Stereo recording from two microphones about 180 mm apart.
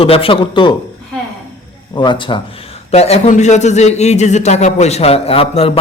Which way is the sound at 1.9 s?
25° left (ahead or behind).